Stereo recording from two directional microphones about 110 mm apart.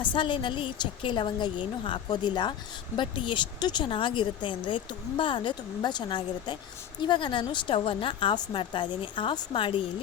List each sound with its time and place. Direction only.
0.0 s a woman's voice: 45° left (ahead or behind)